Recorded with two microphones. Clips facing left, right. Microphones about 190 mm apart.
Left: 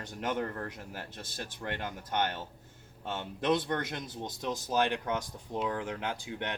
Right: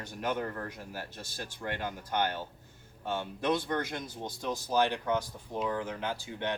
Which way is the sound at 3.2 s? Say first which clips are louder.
Left 2 dB; 20° left (ahead or behind).